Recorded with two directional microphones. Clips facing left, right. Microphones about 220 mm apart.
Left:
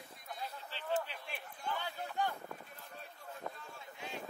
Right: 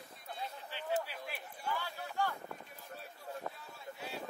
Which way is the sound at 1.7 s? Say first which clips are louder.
Even; 20° left (ahead or behind).